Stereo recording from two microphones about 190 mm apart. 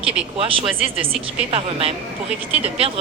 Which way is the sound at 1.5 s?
30° right (ahead or behind).